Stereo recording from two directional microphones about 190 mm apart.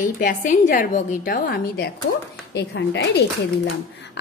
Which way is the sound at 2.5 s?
65° left (ahead or behind).